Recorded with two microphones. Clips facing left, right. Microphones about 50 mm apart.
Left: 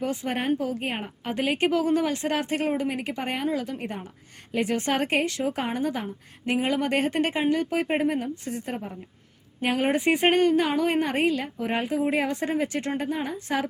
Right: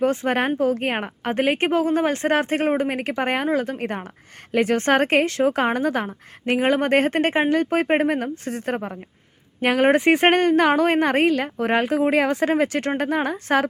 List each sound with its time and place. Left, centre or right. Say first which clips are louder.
0.0 s a woman's voice: right 7 dB; right